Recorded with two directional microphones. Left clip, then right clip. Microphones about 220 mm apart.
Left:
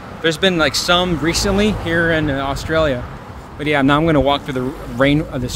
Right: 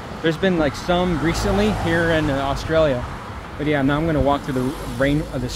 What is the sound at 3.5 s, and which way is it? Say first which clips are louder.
Speech: left 5 dB; 30° left (ahead or behind).